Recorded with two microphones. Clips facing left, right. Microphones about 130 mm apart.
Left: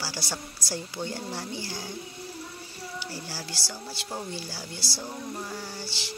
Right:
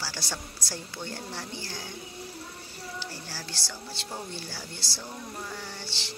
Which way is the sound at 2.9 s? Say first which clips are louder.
Left 3 dB; 10° left (ahead or behind).